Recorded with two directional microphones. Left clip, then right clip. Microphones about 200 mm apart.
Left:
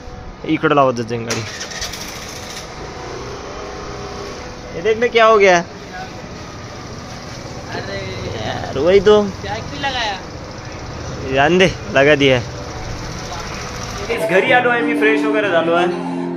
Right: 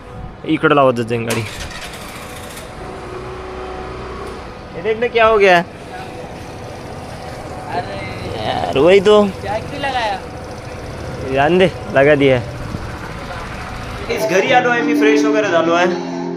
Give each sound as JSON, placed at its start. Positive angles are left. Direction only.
{"t": 0.4, "sound": "speech", "side_deg": -5}
{"t": 4.9, "sound": "speech", "side_deg": 30}
{"t": 5.4, "sound": "speech", "side_deg": 0}
{"t": 8.4, "sound": "a sound", "side_deg": -5}
{"t": 8.7, "sound": "speech", "side_deg": -15}
{"t": 11.3, "sound": "speech", "side_deg": 5}
{"t": 14.3, "sound": "speech", "side_deg": -5}